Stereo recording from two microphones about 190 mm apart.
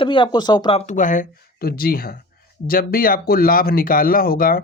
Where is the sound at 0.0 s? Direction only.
25° left (ahead or behind).